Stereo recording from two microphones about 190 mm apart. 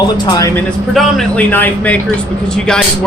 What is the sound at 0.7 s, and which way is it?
A man's voice, centre (ahead or behind).